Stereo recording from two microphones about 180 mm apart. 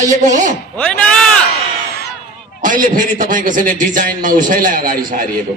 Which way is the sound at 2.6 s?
50° right (ahead or behind).